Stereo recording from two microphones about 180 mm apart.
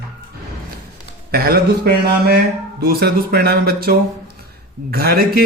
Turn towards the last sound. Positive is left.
turn(degrees=-55)  # may be behind; listen again after turning